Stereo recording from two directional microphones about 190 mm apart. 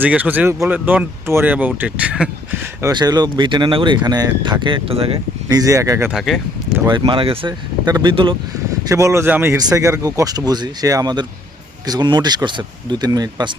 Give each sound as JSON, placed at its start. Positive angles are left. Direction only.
{"t": 0.0, "sound": "speech", "side_deg": -10}
{"t": 2.8, "sound": "speech", "side_deg": -20}
{"t": 6.1, "sound": "speech", "side_deg": 0}
{"t": 6.7, "sound": "speech", "side_deg": -20}